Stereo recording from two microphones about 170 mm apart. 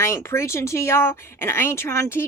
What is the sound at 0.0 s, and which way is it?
Speech, 15° left (ahead or behind).